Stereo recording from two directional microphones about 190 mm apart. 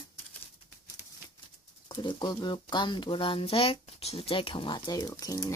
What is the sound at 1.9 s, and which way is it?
Speech, 25° left (ahead or behind).